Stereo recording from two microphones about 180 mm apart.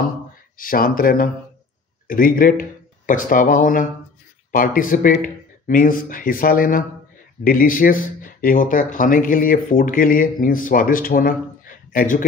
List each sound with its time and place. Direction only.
0.6 s speech: 50° left (ahead or behind)